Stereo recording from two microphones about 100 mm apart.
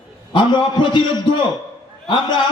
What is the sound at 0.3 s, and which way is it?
A man's voice, 50° left (ahead or behind).